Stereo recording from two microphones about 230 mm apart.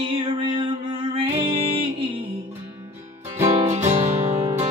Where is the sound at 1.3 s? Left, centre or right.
Right.